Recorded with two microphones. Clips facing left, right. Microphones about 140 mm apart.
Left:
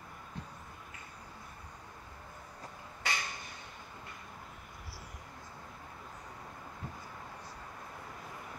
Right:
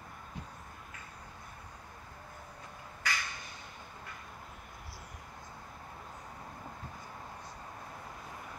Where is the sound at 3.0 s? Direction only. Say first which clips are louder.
Even; 25° left (ahead or behind).